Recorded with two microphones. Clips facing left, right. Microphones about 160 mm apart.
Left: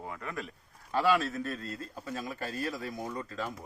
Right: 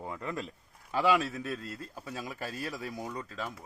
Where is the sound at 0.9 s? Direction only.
15° right (ahead or behind).